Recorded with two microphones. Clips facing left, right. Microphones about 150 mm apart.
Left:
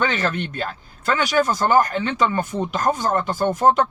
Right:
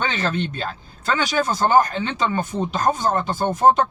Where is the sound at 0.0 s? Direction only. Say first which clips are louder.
Left 1 dB; 30° right (ahead or behind).